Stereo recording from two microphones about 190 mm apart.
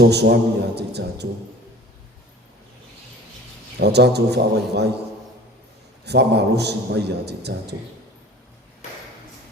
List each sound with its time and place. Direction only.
0.0 s a man's voice: 60° right (ahead or behind)
3.8 s a man's voice: 60° right (ahead or behind)
6.1 s a man's voice: 60° right (ahead or behind)